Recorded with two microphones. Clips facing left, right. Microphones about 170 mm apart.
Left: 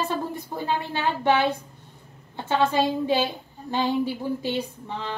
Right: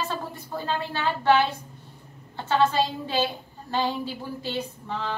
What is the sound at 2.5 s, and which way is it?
Speech, 15° left (ahead or behind).